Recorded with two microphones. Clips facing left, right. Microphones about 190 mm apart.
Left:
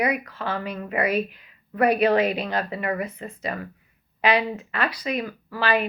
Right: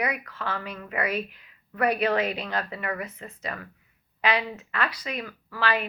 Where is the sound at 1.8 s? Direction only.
15° left (ahead or behind).